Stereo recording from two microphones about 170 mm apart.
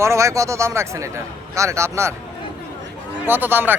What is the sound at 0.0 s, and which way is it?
Speech, 15° right (ahead or behind).